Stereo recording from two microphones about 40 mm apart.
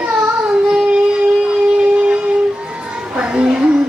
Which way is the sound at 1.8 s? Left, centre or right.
Right.